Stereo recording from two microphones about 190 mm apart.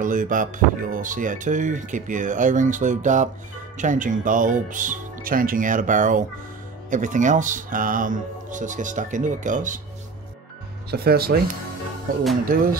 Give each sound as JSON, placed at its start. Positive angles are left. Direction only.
{"t": 0.0, "sound": "speech", "side_deg": -45}
{"t": 10.9, "sound": "speech", "side_deg": -55}
{"t": 12.5, "sound": "speech", "side_deg": -45}